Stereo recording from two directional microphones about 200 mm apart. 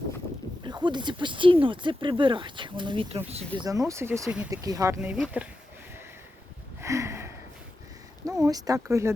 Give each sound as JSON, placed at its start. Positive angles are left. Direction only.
{"t": 0.9, "sound": "speech", "side_deg": -25}
{"t": 6.8, "sound": "a sound", "side_deg": -15}
{"t": 8.3, "sound": "speech", "side_deg": -15}